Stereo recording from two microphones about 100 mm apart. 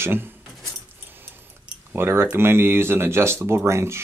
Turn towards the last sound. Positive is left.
turn(degrees=-30)  # may be behind; listen again after turning